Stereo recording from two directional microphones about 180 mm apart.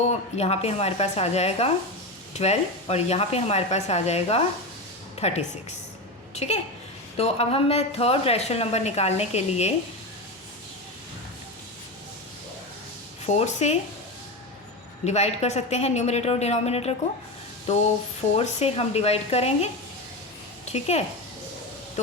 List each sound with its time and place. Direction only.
0.1 s a woman's voice: 35° left (ahead or behind)
13.2 s a woman's voice: 40° left (ahead or behind)
15.0 s a woman's voice: 35° left (ahead or behind)
20.7 s a woman's voice: 35° left (ahead or behind)